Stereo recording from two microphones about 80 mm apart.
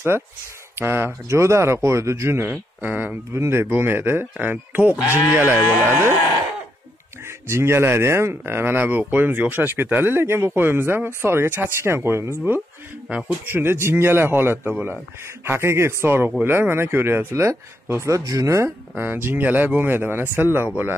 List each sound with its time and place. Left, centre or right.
0.7 s speech: right
3.3 s speech: right
5.0 s speech: left
5.3 s speech: right
7.2 s speech: right
18.1 s speech: right
18.9 s speech: right